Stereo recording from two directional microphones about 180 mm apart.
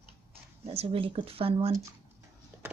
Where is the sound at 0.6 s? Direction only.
30° right (ahead or behind).